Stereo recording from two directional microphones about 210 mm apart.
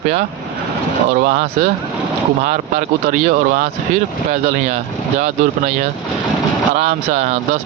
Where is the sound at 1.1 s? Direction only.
40° right (ahead or behind).